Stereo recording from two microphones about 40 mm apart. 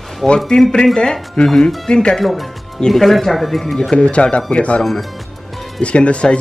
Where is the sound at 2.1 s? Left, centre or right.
Centre.